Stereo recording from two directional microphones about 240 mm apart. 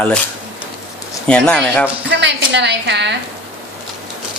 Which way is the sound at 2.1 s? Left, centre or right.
Right.